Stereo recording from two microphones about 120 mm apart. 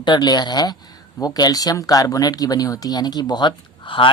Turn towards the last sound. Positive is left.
turn(degrees=45)  # may be behind; listen again after turning